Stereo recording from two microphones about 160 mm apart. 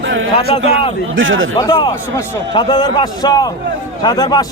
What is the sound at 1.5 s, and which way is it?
A man's voice, 25° left (ahead or behind).